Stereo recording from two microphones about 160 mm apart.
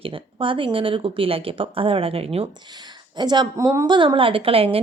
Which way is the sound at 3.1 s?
25° right (ahead or behind).